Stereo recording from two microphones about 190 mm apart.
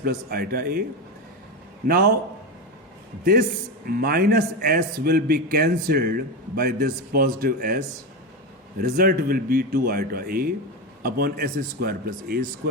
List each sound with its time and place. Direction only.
0.0 s a man's voice: 50° right (ahead or behind)
1.9 s a man's voice: 50° right (ahead or behind)
3.8 s a man's voice: 50° right (ahead or behind)
8.8 s a man's voice: 50° right (ahead or behind)